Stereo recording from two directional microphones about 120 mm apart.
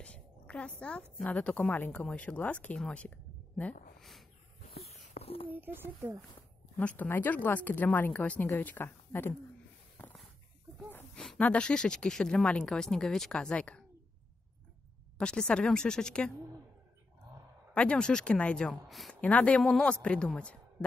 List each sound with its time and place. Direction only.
0.0 s a sound: 10° left (ahead or behind)
1.1 s speech: 10° left (ahead or behind)
4.0 s a sound: centre (ahead or behind)
4.6 s a sound: 60° left (ahead or behind)
5.5 s speech: 15° right (ahead or behind)
6.8 s speech: 15° left (ahead or behind)
11.1 s a woman's voice: 10° left (ahead or behind)
15.1 s speech: 10° left (ahead or behind)
17.7 s speech: 10° left (ahead or behind)